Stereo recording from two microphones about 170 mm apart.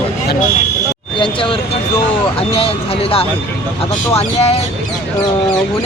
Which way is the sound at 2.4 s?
35° left (ahead or behind).